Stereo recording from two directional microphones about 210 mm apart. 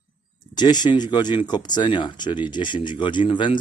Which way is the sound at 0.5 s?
20° left (ahead or behind).